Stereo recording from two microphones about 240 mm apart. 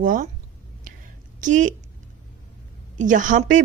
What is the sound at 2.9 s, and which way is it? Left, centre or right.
Speech, right.